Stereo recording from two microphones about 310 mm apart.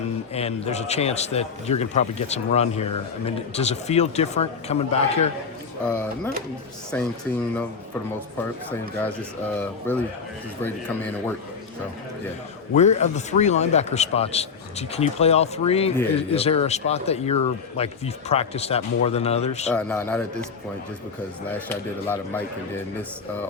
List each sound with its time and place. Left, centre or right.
0.3 s speech: centre
5.8 s speech: centre
9.9 s speech: centre
12.7 s speech: left
19.7 s speech: centre
21.7 s speech: centre